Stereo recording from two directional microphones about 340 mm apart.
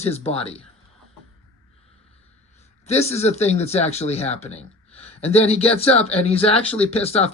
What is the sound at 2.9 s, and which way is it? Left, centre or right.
Speech, centre.